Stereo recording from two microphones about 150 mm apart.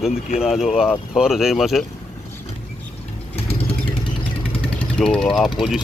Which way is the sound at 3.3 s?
40° left (ahead or behind).